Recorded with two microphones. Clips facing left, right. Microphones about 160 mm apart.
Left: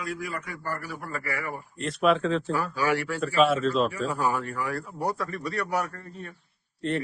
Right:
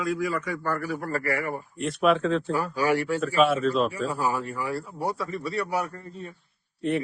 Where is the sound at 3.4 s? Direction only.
Centre (ahead or behind).